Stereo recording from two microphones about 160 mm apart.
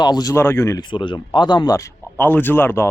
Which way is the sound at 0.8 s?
30° left (ahead or behind).